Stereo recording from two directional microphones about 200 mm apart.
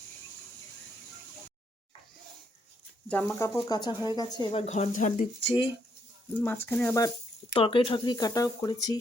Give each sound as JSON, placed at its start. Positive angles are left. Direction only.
{"t": 3.1, "sound": "speech", "side_deg": 10}
{"t": 4.6, "sound": "speech", "side_deg": 35}
{"t": 6.4, "sound": "speech", "side_deg": 10}
{"t": 7.5, "sound": "speech", "side_deg": 25}